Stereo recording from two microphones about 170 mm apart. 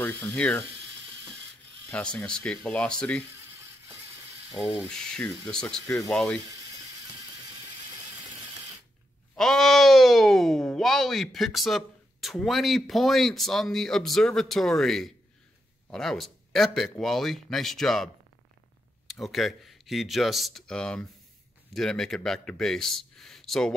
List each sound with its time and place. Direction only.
0.0 s speech: 10° left (ahead or behind)
1.9 s speech: 10° left (ahead or behind)
4.8 s speech: 5° left (ahead or behind)
9.3 s speech: 5° left (ahead or behind)